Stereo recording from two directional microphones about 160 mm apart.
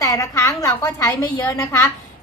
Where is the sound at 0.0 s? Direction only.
20° left (ahead or behind).